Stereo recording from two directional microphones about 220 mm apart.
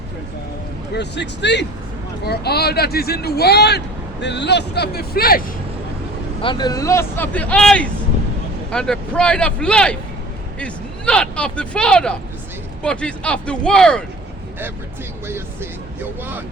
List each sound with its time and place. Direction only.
0.9 s speech: 50° left (ahead or behind)
6.4 s speech: 20° left (ahead or behind); by 14.0 s 5° left (ahead or behind)